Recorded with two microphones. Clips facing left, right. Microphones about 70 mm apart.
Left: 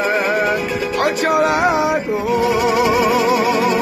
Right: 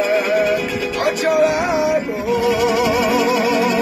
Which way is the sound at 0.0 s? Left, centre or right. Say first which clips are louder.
Right 1 dB; left.